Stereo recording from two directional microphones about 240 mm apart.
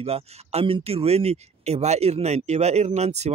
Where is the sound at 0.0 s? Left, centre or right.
Right.